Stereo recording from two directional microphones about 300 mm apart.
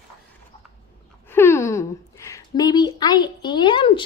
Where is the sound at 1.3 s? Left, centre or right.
Centre.